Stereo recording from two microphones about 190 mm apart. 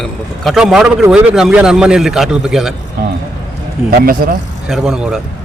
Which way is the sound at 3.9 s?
50° right (ahead or behind).